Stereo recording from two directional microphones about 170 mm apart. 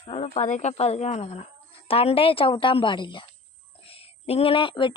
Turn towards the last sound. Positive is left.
turn(degrees=30)  # may be behind; listen again after turning